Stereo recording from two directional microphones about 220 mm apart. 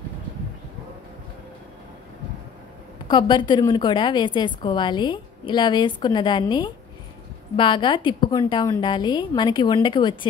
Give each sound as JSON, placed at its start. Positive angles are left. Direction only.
{"t": 3.1, "sound": "a woman's voice", "side_deg": 20}